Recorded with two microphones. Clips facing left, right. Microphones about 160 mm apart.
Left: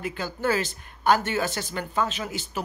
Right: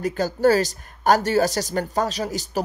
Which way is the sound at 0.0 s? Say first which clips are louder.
Right 9 dB; 40° right (ahead or behind).